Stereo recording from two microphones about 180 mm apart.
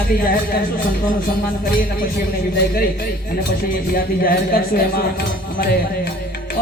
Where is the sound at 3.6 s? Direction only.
55° left (ahead or behind).